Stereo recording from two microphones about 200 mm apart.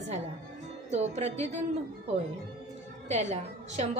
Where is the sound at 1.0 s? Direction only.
35° right (ahead or behind).